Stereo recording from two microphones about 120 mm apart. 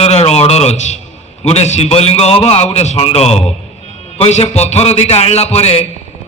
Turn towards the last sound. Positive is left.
turn(degrees=60)  # may be behind; listen again after turning